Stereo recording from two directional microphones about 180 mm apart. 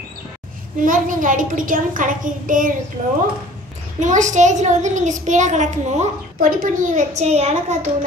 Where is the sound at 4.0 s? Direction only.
40° right (ahead or behind).